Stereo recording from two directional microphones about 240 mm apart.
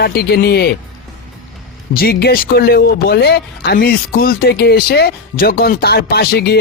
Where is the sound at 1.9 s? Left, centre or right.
Left.